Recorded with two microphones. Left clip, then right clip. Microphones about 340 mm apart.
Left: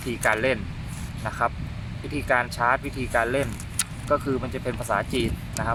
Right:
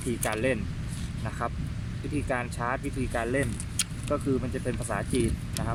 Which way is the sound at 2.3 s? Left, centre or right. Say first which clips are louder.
Left 10 dB; left.